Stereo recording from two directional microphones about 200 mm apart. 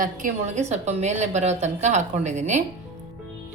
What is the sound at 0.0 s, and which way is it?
A woman's voice, 40° right (ahead or behind).